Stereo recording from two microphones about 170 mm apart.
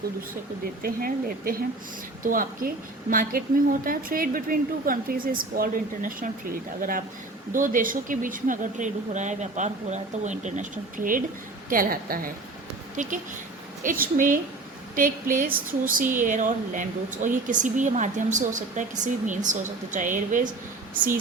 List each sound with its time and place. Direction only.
0.8 s a woman's voice: 60° right (ahead or behind)